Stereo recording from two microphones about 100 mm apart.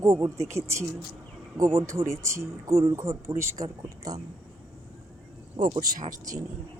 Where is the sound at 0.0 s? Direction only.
35° right (ahead or behind).